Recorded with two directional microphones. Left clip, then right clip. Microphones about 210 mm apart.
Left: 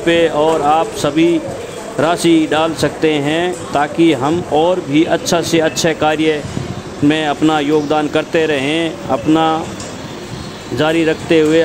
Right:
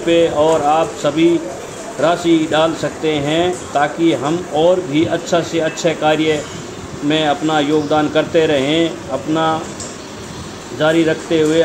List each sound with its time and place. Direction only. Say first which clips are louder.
0.0 s speech: left 1 dB; 55° left (ahead or behind)
10.8 s speech: even; 55° left (ahead or behind)